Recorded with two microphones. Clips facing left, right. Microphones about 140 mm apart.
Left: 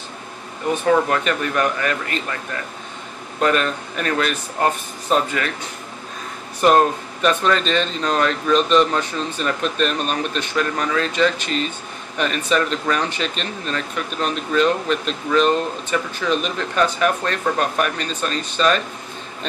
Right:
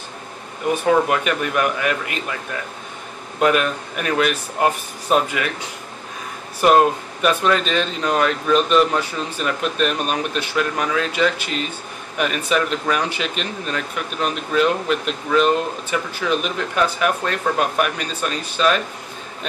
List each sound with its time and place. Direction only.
1.0 s speech: 10° right (ahead or behind)
3.3 s speech: 10° right (ahead or behind)
6.6 s speech: 5° right (ahead or behind)